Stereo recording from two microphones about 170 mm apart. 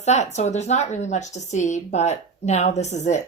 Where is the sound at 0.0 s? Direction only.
40° left (ahead or behind).